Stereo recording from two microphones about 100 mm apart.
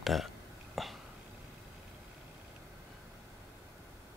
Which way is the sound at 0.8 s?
Centre (ahead or behind).